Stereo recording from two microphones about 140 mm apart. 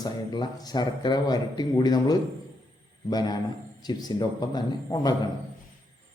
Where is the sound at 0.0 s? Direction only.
30° left (ahead or behind).